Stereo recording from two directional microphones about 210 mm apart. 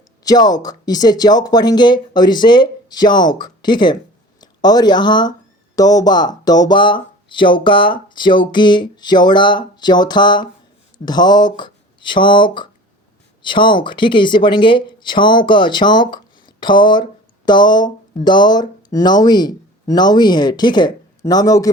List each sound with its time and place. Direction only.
0.3 s speech: 20° left (ahead or behind)